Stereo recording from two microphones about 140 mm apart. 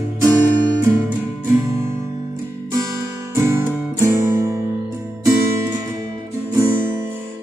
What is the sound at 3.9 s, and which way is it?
Music, 20° right (ahead or behind).